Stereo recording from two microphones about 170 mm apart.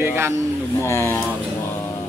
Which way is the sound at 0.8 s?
15° left (ahead or behind).